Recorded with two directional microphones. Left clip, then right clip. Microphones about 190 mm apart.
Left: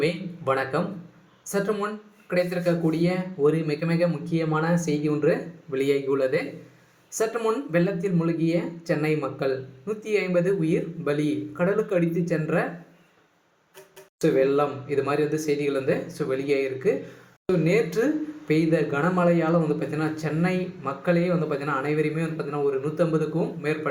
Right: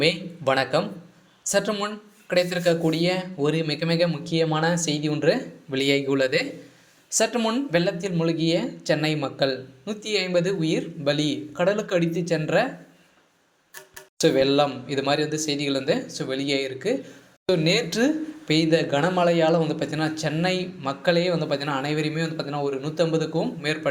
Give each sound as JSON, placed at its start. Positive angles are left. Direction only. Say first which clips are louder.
{"t": 0.0, "sound": "a man's voice", "louder": "right 4 dB", "side_deg": -25}
{"t": 7.4, "sound": "a man's voice", "louder": "right 1 dB", "side_deg": -25}
{"t": 14.2, "sound": "a man's voice", "louder": "right 2 dB", "side_deg": -25}